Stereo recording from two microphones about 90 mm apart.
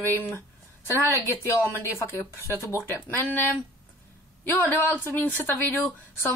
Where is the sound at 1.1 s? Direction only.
30° left (ahead or behind).